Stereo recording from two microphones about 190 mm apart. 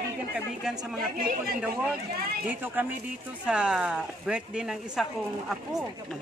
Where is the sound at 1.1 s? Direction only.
50° right (ahead or behind).